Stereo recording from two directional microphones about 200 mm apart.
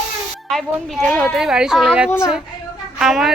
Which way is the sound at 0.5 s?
Centre (ahead or behind).